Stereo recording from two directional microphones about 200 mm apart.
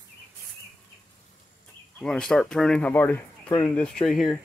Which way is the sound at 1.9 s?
5° left (ahead or behind).